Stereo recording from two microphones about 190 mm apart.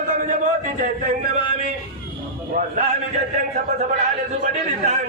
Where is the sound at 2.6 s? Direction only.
45° right (ahead or behind).